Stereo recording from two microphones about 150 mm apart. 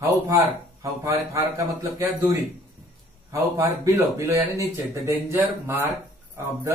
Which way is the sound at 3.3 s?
20° right (ahead or behind).